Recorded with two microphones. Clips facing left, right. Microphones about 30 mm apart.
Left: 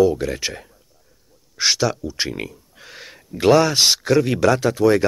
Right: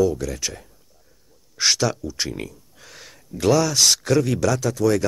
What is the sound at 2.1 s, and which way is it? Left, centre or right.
Speech, left.